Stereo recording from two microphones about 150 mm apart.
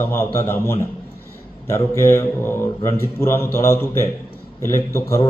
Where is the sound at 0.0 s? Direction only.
15° left (ahead or behind).